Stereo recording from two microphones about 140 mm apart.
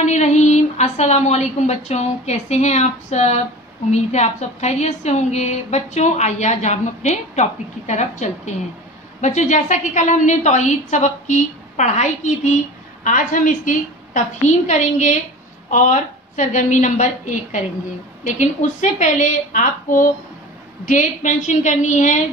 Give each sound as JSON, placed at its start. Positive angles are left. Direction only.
{"t": 0.0, "sound": "a woman's voice", "side_deg": 55}
{"t": 13.0, "sound": "a woman's voice", "side_deg": 70}